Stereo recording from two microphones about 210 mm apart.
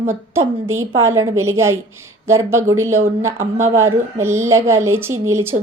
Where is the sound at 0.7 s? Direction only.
75° right (ahead or behind).